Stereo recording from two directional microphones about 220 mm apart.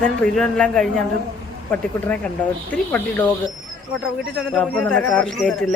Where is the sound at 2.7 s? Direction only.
10° left (ahead or behind).